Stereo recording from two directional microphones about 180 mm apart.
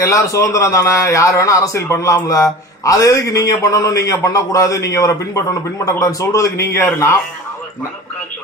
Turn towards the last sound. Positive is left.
turn(degrees=15)  # may be behind; listen again after turning